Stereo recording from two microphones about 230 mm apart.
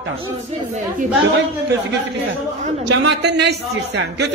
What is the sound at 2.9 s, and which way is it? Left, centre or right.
A woman's voice, right.